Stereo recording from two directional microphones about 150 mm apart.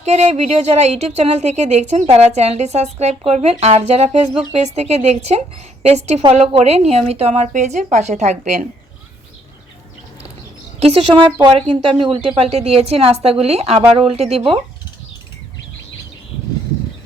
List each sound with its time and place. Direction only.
0.0 s a woman's voice: 50° right (ahead or behind)
10.8 s a woman's voice: 40° right (ahead or behind)